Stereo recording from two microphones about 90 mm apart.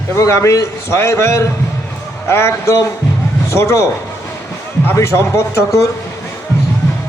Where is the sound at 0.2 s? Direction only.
35° left (ahead or behind).